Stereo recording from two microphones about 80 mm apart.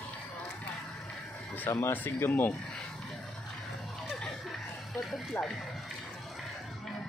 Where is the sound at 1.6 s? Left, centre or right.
Left.